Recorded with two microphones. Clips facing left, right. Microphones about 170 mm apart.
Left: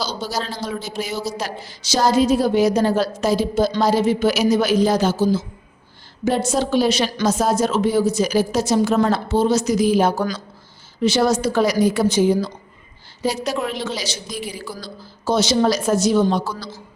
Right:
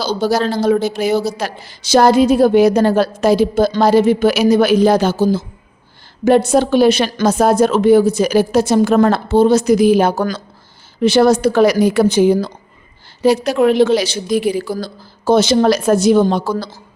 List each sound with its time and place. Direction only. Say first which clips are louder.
0.0 s a man's voice: right 9 dB; 55° right (ahead or behind)